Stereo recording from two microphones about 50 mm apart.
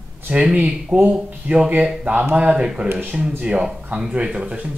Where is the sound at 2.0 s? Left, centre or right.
Right.